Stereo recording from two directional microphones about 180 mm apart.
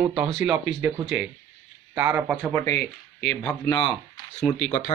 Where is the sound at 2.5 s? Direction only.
15° left (ahead or behind).